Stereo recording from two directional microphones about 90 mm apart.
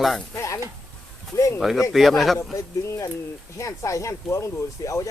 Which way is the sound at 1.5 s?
Centre (ahead or behind).